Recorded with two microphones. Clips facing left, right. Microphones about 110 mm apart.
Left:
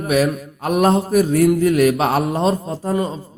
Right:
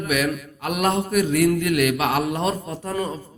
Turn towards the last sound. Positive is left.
turn(degrees=25)  # may be behind; listen again after turning